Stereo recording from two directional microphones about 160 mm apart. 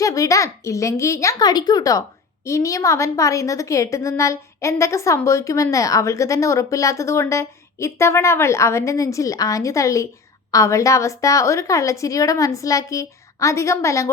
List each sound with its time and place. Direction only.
0.0 s a child's voice: 20° left (ahead or behind)